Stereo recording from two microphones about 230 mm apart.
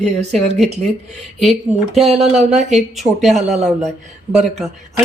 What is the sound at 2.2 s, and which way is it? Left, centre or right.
Speech, right.